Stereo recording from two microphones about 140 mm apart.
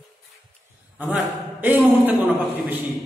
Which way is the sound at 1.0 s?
15° right (ahead or behind).